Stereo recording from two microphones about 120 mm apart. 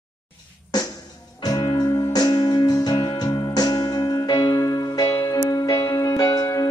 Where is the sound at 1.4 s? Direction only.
35° left (ahead or behind).